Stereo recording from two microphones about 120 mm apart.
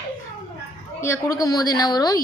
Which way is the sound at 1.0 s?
25° left (ahead or behind).